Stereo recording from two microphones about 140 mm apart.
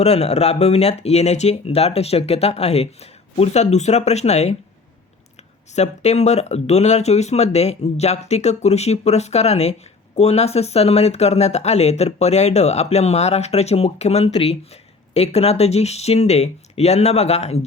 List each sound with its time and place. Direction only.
0.0 s speech: 50° left (ahead or behind)
5.7 s speech: 55° left (ahead or behind)